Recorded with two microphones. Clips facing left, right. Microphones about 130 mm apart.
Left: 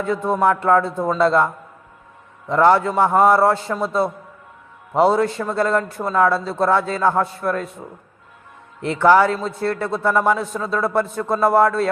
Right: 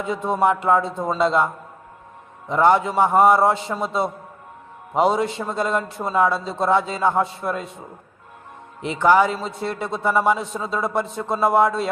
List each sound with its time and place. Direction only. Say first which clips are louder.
0.1 s a man's voice: left 1 dB; 25° right (ahead or behind)
2.5 s a man's voice: left 2 dB; 15° right (ahead or behind)
8.8 s a man's voice: left 2 dB; 10° right (ahead or behind)